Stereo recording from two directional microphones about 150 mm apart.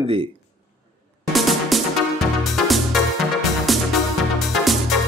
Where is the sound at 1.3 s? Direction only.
Centre (ahead or behind).